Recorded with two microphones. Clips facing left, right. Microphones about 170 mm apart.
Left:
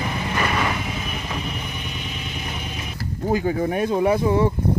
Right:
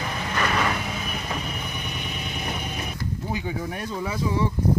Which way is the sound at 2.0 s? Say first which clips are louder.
Even; 55° right (ahead or behind).